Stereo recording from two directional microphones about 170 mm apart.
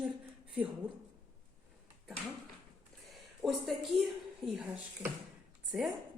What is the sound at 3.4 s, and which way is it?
Speech, centre (ahead or behind).